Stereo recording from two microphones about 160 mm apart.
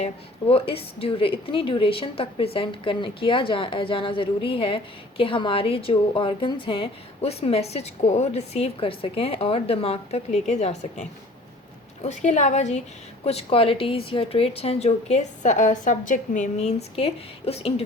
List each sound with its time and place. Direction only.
0.0 s a woman's voice: 35° left (ahead or behind)